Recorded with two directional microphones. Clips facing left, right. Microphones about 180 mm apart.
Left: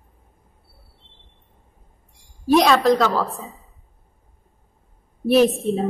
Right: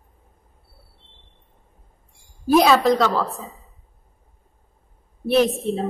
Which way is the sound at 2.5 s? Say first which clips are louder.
Even; centre (ahead or behind).